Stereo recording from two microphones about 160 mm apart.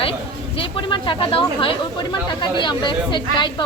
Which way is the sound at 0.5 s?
35° left (ahead or behind).